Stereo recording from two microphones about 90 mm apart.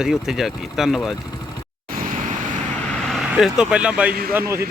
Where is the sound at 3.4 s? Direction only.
5° right (ahead or behind).